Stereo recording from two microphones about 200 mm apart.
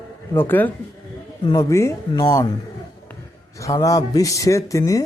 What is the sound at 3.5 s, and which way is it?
Speech, 15° left (ahead or behind).